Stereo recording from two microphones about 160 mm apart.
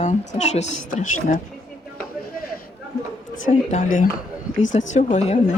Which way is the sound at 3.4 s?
50° left (ahead or behind).